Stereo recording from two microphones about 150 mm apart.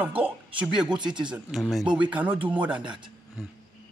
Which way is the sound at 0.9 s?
30° right (ahead or behind).